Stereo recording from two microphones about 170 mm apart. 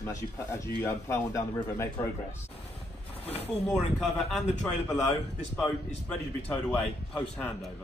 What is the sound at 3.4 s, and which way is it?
A man's voice, 5° left (ahead or behind).